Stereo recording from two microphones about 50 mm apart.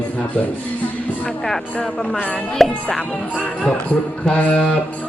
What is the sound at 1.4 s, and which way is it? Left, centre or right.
Speech, centre.